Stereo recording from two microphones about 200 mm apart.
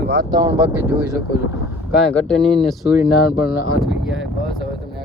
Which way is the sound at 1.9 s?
5° left (ahead or behind).